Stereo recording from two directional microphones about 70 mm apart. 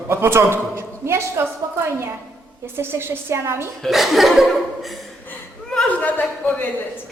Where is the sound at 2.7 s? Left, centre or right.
Right.